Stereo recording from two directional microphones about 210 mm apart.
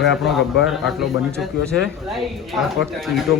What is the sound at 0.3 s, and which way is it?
Speech, centre (ahead or behind).